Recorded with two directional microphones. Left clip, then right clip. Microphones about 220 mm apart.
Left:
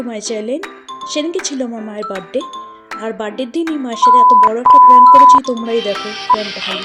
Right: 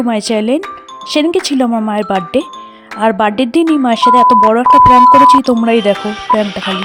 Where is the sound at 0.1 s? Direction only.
50° right (ahead or behind).